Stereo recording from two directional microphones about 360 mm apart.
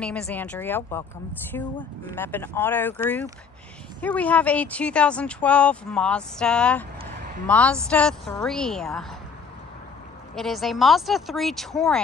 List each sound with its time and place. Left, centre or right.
0.0 s speech: centre
10.3 s speech: centre